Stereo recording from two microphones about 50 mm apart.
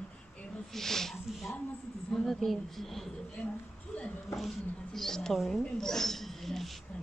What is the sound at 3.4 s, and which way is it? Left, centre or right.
Speech, left.